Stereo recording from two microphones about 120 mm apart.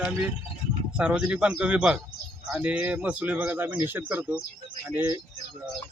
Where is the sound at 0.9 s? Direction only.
10° right (ahead or behind).